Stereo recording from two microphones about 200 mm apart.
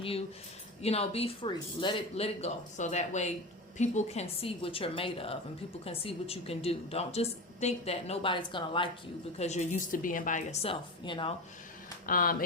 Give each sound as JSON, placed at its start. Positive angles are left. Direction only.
{"t": 0.0, "sound": "a woman's voice", "side_deg": 30}
{"t": 9.4, "sound": "speech", "side_deg": 35}
{"t": 12.0, "sound": "speech", "side_deg": 45}